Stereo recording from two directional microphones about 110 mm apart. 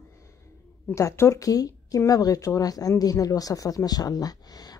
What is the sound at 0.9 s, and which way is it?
A woman's voice, 25° left (ahead or behind).